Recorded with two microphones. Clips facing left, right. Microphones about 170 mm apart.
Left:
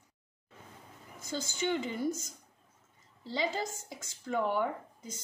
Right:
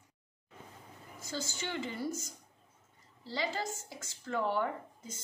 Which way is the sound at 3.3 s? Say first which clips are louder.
Left 2 dB; 20° left (ahead or behind).